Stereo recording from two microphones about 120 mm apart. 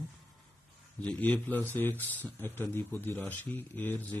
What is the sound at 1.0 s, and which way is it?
Speech, 10° left (ahead or behind).